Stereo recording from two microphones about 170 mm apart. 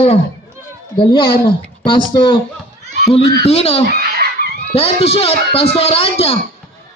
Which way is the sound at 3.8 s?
65° right (ahead or behind).